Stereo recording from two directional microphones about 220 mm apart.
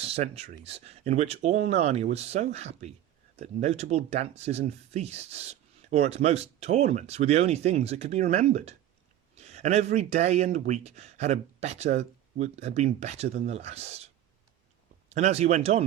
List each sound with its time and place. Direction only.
0.0 s speech: 25° right (ahead or behind)
15.1 s speech: 30° right (ahead or behind)